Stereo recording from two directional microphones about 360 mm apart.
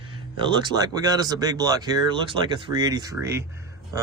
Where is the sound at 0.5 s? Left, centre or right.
Centre.